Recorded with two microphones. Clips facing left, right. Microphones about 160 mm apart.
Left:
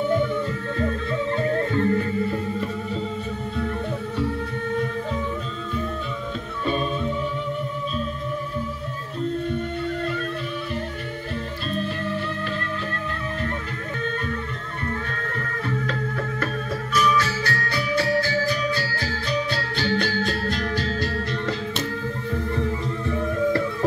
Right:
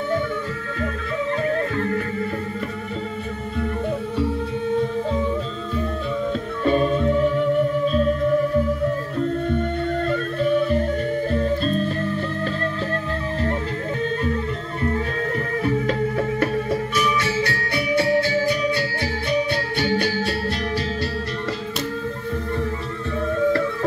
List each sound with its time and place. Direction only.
1.4 s music: 25° left (ahead or behind)
6.7 s music: 25° right (ahead or behind)
10.0 s music: 45° right (ahead or behind)
14.9 s music: 25° right (ahead or behind)